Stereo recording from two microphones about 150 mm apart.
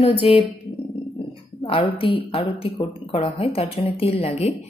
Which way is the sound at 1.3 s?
35° left (ahead or behind).